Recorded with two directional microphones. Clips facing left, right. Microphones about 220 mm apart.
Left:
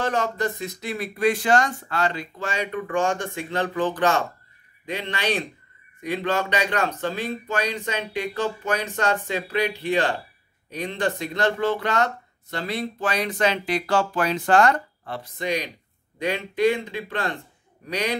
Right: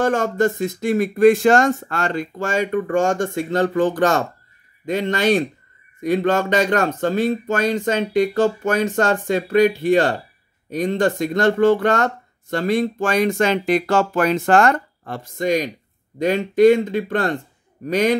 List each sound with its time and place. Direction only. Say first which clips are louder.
0.0 s speech: right 7 dB; 45° right (ahead or behind)